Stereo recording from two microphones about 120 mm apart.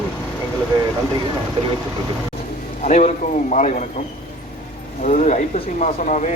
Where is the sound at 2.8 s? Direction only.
85° left.